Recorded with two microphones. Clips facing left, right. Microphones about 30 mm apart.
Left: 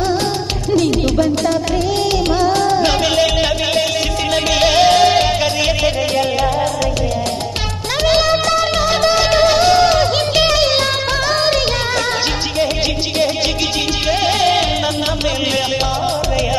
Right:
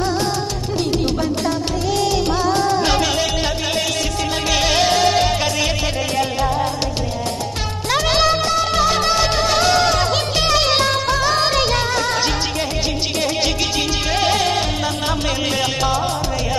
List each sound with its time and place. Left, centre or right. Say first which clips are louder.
2.5 s music: left 3 dB; left
4.5 s music: left 5 dB; centre
9.5 s music: left 4 dB; centre
10.5 s music of bollywood: left 2 dB; centre